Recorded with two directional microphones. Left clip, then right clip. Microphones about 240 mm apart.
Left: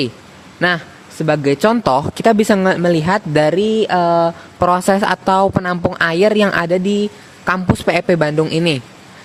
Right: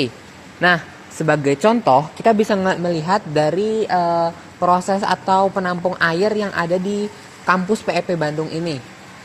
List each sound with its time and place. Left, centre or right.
0.6 s speech: left
1.6 s a woman's voice: left